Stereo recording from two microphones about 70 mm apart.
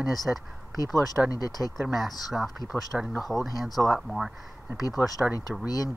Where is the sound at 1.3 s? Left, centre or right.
Left.